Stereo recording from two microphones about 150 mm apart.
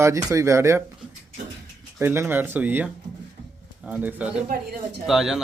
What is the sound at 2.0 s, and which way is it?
A man's voice, 15° right (ahead or behind).